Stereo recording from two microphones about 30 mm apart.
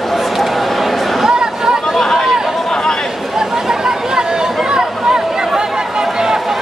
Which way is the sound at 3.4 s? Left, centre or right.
Centre.